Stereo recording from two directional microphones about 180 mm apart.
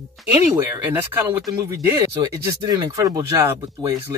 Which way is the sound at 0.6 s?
10° right (ahead or behind).